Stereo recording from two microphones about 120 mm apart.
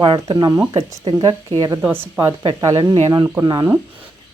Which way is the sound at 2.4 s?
30° right (ahead or behind).